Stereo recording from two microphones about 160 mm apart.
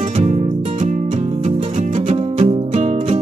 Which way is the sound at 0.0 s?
45° right (ahead or behind).